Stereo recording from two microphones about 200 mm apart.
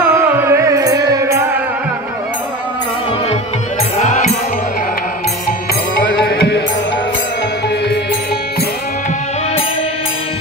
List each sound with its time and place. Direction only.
0.4 s music: 15° right (ahead or behind)
4.0 s music: 40° left (ahead or behind)
5.9 s music: 55° left (ahead or behind)